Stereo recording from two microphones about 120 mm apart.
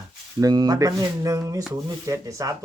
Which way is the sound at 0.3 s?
35° right (ahead or behind).